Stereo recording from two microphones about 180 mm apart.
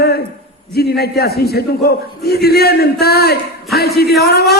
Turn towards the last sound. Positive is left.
turn(degrees=60)  # may be behind; listen again after turning